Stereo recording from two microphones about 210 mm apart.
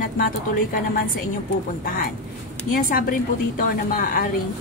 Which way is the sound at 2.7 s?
40° left (ahead or behind).